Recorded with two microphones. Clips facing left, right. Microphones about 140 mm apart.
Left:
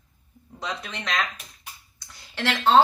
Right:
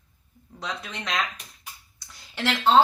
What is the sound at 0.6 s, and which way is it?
Speech, 5° right (ahead or behind).